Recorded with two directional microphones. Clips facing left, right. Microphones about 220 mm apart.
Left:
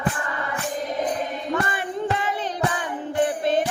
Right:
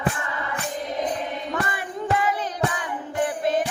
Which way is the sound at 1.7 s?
25° left (ahead or behind).